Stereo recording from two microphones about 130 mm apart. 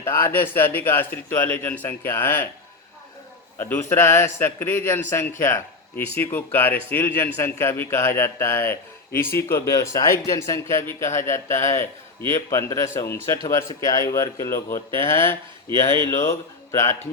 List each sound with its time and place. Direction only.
0.0 s speech: 15° left (ahead or behind)
3.6 s speech: 15° left (ahead or behind)